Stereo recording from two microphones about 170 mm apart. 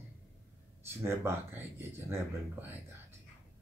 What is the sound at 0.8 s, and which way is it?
Speech, 15° right (ahead or behind).